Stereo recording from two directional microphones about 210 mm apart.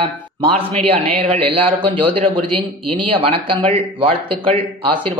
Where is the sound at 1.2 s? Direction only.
30° right (ahead or behind).